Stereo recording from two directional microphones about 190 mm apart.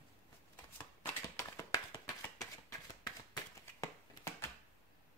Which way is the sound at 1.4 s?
15° left (ahead or behind).